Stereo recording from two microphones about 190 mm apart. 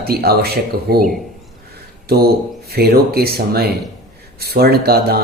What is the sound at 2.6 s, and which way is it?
Speech, 55° right (ahead or behind).